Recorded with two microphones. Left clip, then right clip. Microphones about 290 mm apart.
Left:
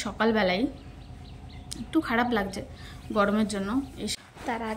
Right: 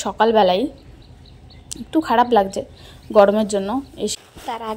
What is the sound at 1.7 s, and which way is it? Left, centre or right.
A woman's voice, centre.